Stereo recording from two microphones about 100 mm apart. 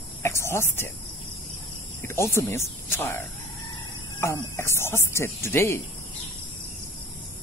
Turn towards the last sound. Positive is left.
turn(degrees=25)  # may be behind; listen again after turning